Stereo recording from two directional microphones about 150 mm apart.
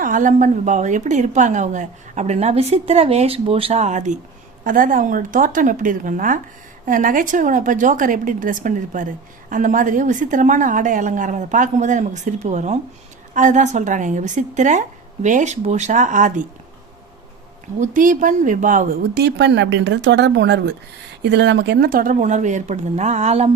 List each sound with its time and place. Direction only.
0.0 s a woman's voice: 60° right (ahead or behind)
4.6 s a woman's voice: 65° right (ahead or behind)
17.7 s a woman's voice: 60° right (ahead or behind); by 19.3 s 80° right
21.6 s a woman's voice: 80° right; by 23.5 s 45° right (ahead or behind)